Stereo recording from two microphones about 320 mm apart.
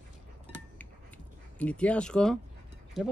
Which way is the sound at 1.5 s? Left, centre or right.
Centre.